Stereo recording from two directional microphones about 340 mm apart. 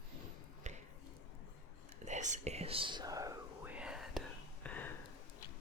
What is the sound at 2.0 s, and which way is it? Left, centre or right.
Whispering, right.